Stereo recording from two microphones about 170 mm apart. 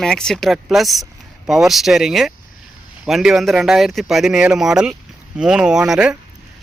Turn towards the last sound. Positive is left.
turn(degrees=-5)  # may be behind; listen again after turning